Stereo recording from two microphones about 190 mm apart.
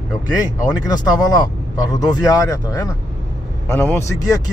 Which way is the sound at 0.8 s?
20° left (ahead or behind).